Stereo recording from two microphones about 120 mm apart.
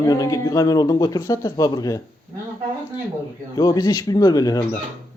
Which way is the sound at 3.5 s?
35° left (ahead or behind).